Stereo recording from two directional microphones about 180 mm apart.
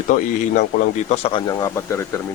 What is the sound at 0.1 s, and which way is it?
Speech, 45° left (ahead or behind).